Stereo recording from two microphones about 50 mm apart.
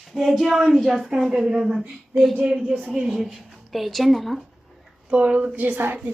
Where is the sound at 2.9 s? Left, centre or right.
Centre.